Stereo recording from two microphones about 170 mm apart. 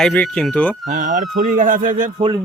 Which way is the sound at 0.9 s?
50° right (ahead or behind).